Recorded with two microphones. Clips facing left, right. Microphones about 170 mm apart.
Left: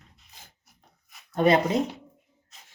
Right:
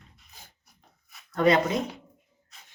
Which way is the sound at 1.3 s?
25° left (ahead or behind).